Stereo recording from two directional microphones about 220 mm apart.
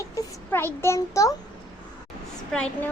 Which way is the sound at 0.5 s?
10° left (ahead or behind).